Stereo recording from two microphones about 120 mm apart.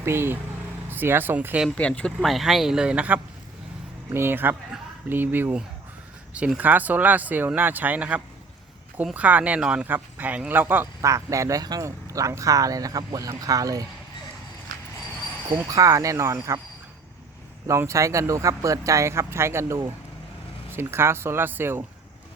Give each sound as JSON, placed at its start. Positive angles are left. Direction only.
{"t": 0.0, "sound": "speech", "side_deg": -20}
{"t": 1.7, "sound": "speech", "side_deg": 10}
{"t": 15.7, "sound": "speech", "side_deg": -25}
{"t": 17.7, "sound": "speech", "side_deg": -25}